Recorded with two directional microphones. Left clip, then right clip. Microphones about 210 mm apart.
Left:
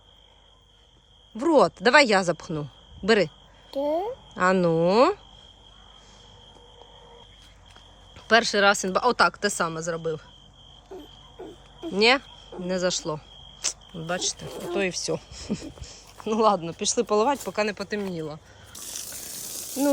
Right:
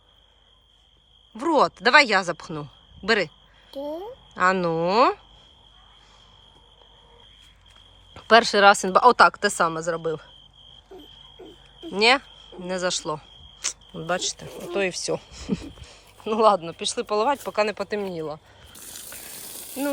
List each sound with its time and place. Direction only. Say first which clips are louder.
1.3 s speech: left 1 dB; 10° left (ahead or behind)
8.1 s speech: right 4 dB; centre (ahead or behind)
11.8 s speech: right 1 dB; 5° left (ahead or behind)
19.5 s a sound: left 4 dB; 20° right (ahead or behind)